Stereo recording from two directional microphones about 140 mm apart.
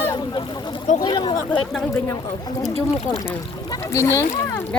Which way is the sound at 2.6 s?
50° left (ahead or behind).